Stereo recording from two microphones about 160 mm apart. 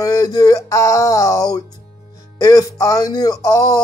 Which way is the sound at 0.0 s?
20° left (ahead or behind).